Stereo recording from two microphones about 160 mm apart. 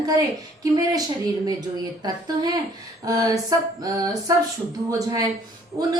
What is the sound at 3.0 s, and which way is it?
A woman's voice, 20° right (ahead or behind).